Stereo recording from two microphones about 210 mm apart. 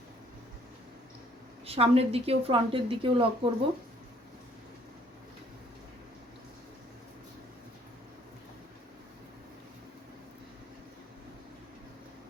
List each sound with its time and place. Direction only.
1.6 s a woman's voice: 30° right (ahead or behind)